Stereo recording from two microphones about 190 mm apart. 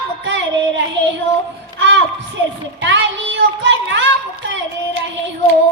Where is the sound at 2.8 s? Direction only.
75° right (ahead or behind).